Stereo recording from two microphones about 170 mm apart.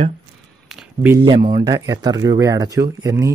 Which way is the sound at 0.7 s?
5° right (ahead or behind).